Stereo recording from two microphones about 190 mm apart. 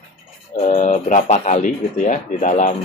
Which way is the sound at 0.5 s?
35° left (ahead or behind).